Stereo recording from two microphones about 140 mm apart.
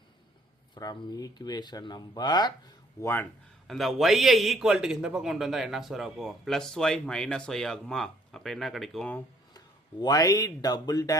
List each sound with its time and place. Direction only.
0.7 s speech: 30° left (ahead or behind)
3.7 s a man's voice: centre (ahead or behind)
9.6 s speech: 25° left (ahead or behind)